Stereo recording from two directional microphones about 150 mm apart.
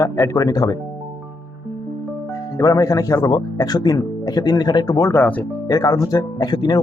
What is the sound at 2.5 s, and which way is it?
Speech, 20° left (ahead or behind).